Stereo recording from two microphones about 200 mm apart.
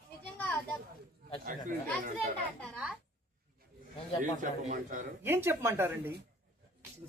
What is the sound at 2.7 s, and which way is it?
Speech, 5° right (ahead or behind).